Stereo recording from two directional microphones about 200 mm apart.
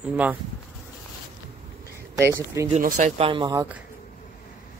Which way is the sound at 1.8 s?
15° right (ahead or behind).